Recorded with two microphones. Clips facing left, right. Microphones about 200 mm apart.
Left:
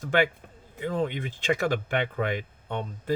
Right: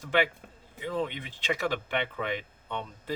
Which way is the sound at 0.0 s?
50° left (ahead or behind).